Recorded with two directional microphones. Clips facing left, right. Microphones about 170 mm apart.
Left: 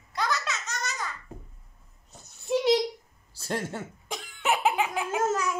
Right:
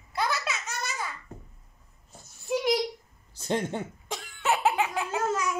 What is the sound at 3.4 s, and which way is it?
Speech, 20° right (ahead or behind).